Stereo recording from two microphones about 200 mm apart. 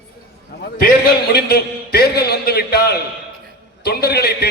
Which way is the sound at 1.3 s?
55° left (ahead or behind).